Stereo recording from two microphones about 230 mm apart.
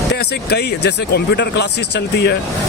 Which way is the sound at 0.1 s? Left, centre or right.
Left.